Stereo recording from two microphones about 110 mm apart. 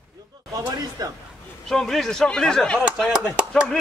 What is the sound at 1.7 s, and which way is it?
Speech, 5° left (ahead or behind).